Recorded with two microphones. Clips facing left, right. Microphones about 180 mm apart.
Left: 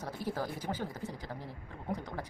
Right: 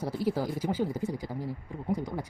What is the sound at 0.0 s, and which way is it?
Speech, 10° right (ahead or behind).